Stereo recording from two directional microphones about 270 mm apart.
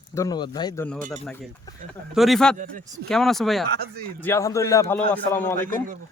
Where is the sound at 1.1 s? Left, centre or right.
Centre.